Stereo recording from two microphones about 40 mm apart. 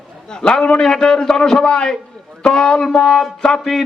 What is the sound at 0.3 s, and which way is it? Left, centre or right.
A man's voice, centre.